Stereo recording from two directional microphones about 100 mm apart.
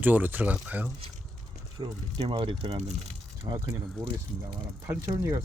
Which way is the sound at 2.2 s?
65° right (ahead or behind).